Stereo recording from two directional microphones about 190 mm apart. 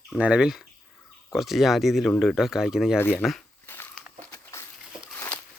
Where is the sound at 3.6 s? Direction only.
10° left (ahead or behind).